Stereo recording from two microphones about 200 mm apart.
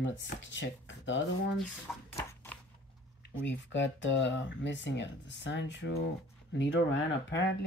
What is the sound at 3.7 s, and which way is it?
Speech, 65° left (ahead or behind).